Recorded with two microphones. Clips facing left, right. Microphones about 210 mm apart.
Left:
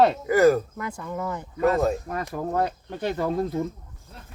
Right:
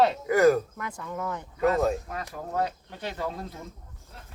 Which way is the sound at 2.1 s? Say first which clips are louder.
Left 6 dB; 50° left (ahead or behind).